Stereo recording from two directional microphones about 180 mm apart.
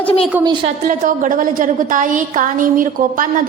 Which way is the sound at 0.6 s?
45° right (ahead or behind).